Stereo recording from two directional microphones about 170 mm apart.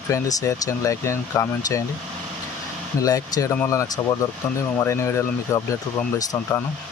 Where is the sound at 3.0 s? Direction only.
20° left (ahead or behind).